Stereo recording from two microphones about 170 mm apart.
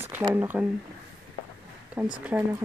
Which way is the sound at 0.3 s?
10° right (ahead or behind).